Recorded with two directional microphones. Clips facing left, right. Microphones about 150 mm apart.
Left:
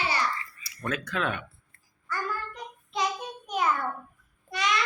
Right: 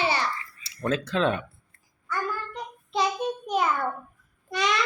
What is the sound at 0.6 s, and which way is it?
Speech, 25° right (ahead or behind).